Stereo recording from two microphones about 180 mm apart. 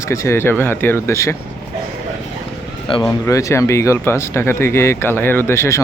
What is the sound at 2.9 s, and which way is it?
Speech, 30° left (ahead or behind).